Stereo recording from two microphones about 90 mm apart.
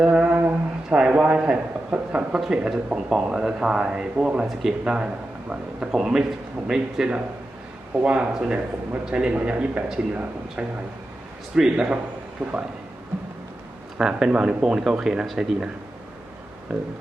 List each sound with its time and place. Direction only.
0.0 s speech: 10° right (ahead or behind)
0.3 s a sound: 20° right (ahead or behind)
0.9 s speech: 10° right (ahead or behind)
14.0 s speech: 5° right (ahead or behind)